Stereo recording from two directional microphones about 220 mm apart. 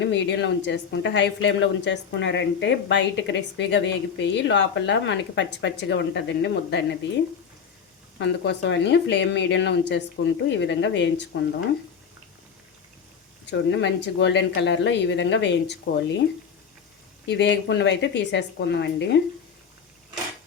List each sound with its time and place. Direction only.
0.0 s speech: 55° left (ahead or behind)
8.2 s speech: 50° left (ahead or behind)
13.5 s speech: 50° left (ahead or behind)
17.2 s speech: 55° left (ahead or behind)